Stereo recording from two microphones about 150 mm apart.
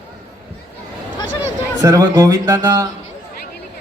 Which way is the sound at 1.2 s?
20° right (ahead or behind).